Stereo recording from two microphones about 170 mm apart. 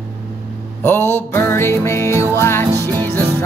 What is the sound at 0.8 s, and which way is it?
Music, 15° left (ahead or behind).